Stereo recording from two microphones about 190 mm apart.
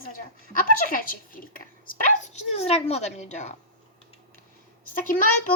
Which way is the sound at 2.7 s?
35° left (ahead or behind).